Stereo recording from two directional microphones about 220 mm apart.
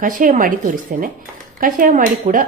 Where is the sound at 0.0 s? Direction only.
35° right (ahead or behind).